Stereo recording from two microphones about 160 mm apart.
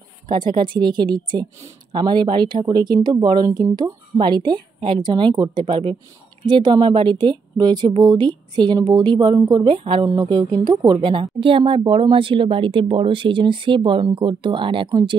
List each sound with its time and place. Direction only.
0.3 s speech: 30° right (ahead or behind)